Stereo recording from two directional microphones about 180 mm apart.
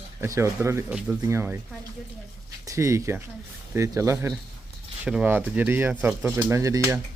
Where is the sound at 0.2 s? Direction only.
15° right (ahead or behind).